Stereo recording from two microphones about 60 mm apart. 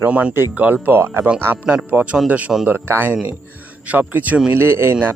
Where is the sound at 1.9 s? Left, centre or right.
Right.